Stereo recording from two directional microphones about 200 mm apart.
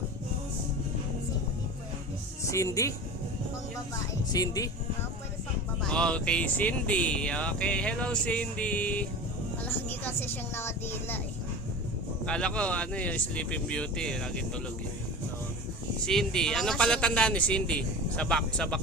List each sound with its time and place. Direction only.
2.4 s speech: 15° left (ahead or behind)
4.3 s speech: 20° left (ahead or behind)
5.8 s speech: 5° left (ahead or behind)
9.6 s vehicle: 10° left (ahead or behind)
12.2 s speech: 5° left (ahead or behind)
16.0 s speech: 5° left (ahead or behind)